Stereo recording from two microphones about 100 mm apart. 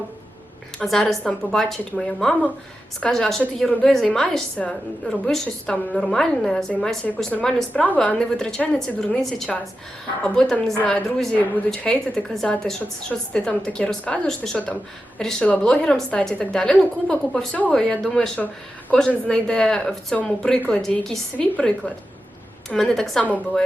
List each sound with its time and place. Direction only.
0.8 s a woman's voice: 5° left (ahead or behind)
23.2 s a woman's voice: 15° left (ahead or behind)